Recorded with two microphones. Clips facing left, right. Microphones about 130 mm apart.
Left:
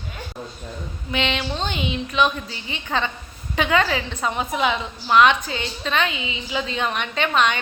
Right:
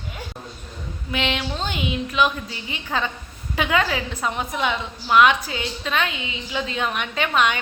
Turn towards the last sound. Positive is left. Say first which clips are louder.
# left 1 dB
turn(degrees=-5)  # may be behind; listen again after turning